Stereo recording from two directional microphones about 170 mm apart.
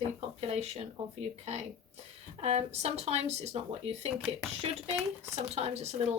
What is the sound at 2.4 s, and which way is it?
A woman's voice, 40° right (ahead or behind).